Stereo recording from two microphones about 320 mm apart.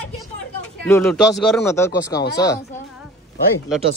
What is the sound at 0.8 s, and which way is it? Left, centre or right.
Speech, centre.